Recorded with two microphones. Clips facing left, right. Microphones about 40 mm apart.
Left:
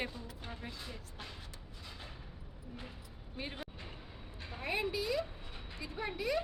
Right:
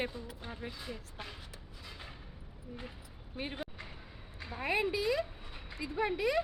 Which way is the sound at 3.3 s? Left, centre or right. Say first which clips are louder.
Right 3 dB; centre.